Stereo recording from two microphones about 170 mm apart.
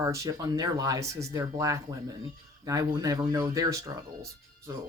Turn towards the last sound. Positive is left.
turn(degrees=-20)  # may be behind; listen again after turning